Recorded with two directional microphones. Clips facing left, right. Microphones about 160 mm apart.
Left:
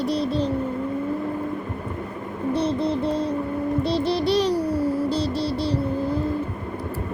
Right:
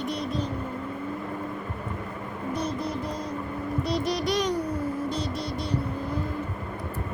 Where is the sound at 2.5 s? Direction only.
30° left (ahead or behind).